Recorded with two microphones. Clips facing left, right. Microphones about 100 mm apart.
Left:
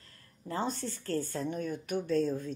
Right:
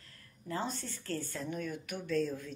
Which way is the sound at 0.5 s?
30° left (ahead or behind).